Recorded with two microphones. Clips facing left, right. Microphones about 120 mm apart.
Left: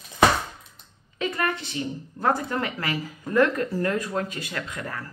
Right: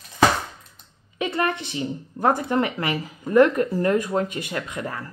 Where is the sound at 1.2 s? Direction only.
20° right (ahead or behind).